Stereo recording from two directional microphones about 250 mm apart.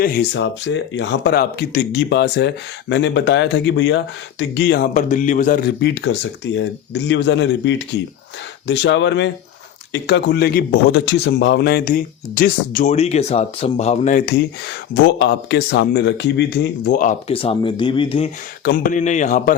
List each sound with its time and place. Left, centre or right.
0.0 s speech: left
5.8 s a man's voice: left
18.6 s a man's voice: left